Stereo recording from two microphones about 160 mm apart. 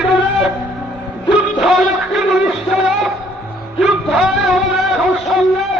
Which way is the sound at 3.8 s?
5° right (ahead or behind).